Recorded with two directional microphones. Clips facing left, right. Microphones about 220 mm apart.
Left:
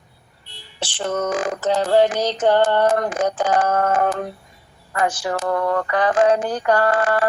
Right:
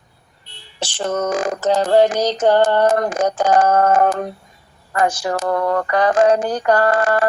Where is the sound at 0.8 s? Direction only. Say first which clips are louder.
Right 2 dB; 45° right (ahead or behind).